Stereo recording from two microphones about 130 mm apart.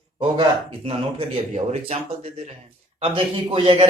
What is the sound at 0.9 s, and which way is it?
Speech, 50° right (ahead or behind).